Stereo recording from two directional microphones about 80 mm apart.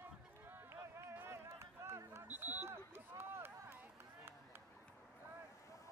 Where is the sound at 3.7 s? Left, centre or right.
Right.